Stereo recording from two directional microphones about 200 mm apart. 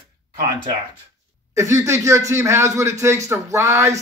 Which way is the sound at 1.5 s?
15° right (ahead or behind).